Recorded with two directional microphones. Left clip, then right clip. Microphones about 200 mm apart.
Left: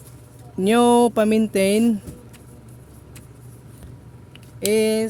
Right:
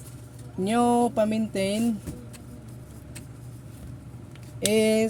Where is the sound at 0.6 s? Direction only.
50° left (ahead or behind).